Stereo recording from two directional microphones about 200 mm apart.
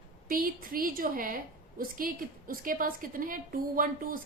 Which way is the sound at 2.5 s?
45° right (ahead or behind).